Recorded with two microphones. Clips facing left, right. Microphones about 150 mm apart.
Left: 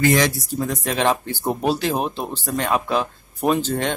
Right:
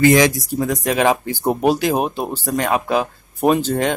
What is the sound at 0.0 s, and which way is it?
Speech, 15° right (ahead or behind).